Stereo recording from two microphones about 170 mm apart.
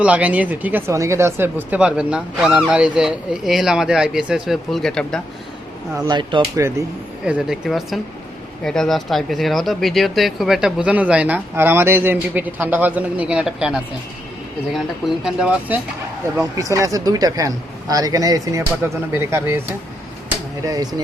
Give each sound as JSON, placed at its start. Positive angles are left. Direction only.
{"t": 0.0, "sound": "speech", "side_deg": -10}
{"t": 6.1, "sound": "speech", "side_deg": -25}
{"t": 7.3, "sound": "speech", "side_deg": -5}
{"t": 16.4, "sound": "speech", "side_deg": -20}